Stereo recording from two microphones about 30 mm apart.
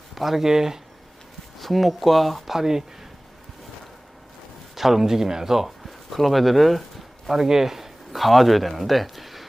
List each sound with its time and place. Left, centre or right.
0.1 s speech: centre
1.5 s speech: centre
2.6 s speech: centre
4.7 s speech: centre
5.8 s speech: centre
7.3 s speech: centre